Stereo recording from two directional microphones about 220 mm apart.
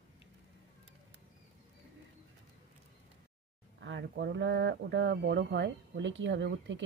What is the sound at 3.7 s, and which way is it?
Speech, 55° right (ahead or behind).